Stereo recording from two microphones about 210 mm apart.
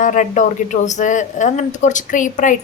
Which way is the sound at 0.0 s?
35° left (ahead or behind).